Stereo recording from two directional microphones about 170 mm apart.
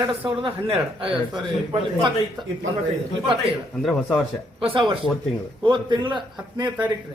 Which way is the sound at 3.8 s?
Centre (ahead or behind).